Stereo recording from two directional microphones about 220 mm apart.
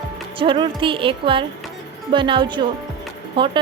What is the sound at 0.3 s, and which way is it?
Speech, 25° right (ahead or behind).